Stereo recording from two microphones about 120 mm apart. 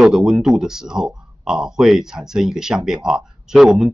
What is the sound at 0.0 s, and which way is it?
Speech, centre (ahead or behind).